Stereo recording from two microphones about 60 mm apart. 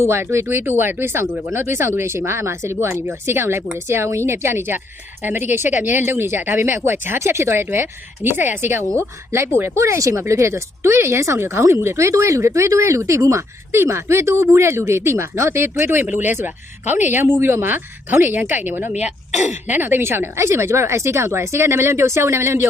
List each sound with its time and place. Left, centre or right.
0.0 s speech: right